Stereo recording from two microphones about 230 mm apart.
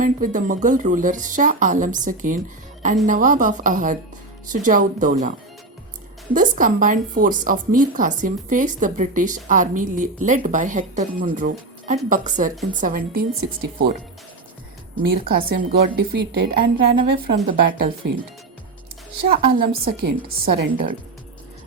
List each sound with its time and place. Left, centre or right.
0.0 s a woman's voice: right
6.3 s a woman's voice: right
15.0 s a woman's voice: right
19.3 s a woman's voice: right